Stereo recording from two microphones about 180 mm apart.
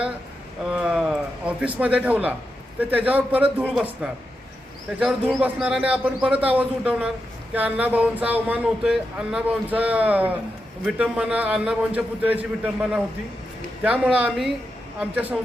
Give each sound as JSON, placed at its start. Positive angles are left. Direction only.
{"t": 0.7, "sound": "speech", "side_deg": -5}